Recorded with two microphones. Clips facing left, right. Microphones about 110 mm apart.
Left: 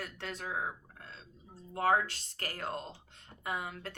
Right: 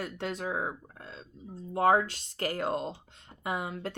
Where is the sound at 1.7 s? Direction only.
25° right (ahead or behind).